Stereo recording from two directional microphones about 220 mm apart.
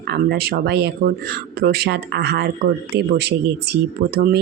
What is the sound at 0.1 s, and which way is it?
Speech, 45° right (ahead or behind).